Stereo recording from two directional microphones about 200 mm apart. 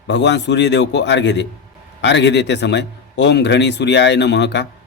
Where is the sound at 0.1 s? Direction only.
60° left (ahead or behind).